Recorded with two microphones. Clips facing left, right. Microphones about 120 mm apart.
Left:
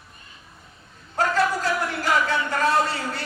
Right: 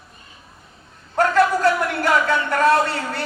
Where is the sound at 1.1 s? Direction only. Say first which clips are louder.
Right 5 dB; 60° right (ahead or behind).